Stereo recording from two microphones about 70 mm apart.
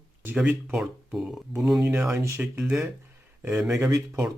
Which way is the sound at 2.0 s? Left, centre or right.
Right.